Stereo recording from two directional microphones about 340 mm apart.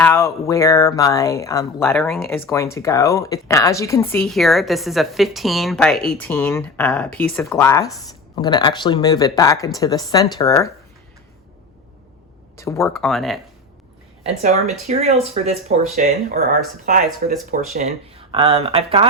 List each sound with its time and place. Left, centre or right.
0.0 s speech: centre
12.5 s speech: centre
14.4 s speech: centre